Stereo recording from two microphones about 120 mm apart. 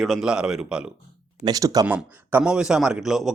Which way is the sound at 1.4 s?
30° right (ahead or behind).